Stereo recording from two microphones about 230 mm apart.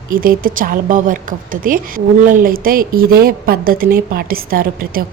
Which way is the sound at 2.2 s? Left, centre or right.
Right.